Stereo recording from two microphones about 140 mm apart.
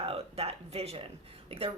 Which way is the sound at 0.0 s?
45° right (ahead or behind).